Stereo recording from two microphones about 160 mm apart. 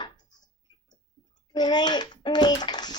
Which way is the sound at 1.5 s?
25° left (ahead or behind).